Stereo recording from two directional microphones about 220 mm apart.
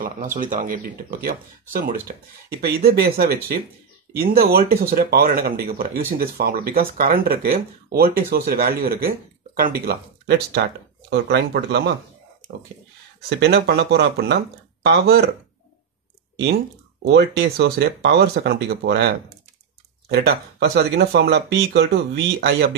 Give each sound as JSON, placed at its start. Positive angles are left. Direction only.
{"t": 0.0, "sound": "speech", "side_deg": -35}
{"t": 13.4, "sound": "speech", "side_deg": -45}
{"t": 17.1, "sound": "speech", "side_deg": -50}
{"t": 20.1, "sound": "speech", "side_deg": -45}